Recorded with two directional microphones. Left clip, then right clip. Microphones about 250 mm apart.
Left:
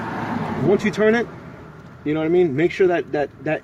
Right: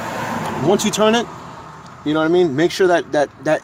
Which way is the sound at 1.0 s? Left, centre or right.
Centre.